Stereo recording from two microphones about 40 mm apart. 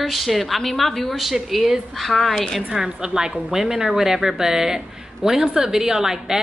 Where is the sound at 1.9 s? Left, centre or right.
Centre.